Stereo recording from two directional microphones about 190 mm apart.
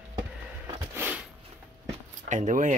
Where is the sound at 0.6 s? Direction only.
10° right (ahead or behind).